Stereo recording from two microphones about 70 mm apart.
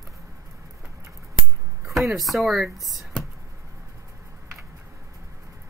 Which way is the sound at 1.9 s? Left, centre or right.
Centre.